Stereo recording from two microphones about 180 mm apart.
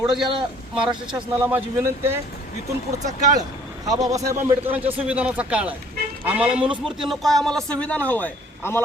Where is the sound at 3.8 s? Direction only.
20° right (ahead or behind).